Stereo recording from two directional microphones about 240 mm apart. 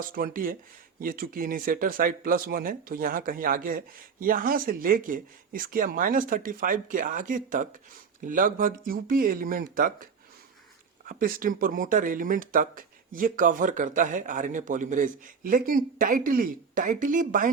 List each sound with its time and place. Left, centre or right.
0.0 s speech: right